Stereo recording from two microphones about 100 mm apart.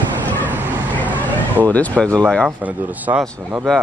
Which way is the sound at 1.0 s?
15° left (ahead or behind).